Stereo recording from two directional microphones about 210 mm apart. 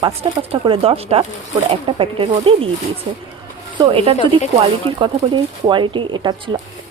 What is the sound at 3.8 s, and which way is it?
A woman's voice, 25° right (ahead or behind).